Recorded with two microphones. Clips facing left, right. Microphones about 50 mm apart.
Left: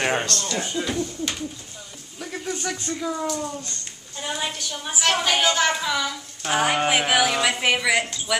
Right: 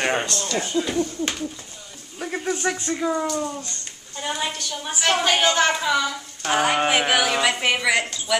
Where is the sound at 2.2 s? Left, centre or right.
Right.